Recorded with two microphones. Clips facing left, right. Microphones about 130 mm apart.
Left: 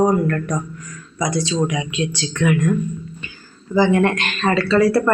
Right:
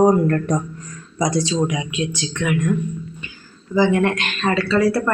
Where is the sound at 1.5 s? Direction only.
10° right (ahead or behind).